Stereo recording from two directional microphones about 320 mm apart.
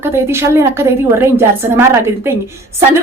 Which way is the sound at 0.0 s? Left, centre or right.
Centre.